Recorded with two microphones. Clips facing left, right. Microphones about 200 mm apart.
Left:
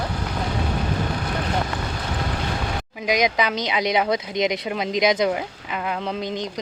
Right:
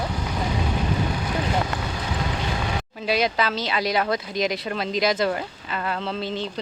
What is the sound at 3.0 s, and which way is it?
Speech, 15° left (ahead or behind).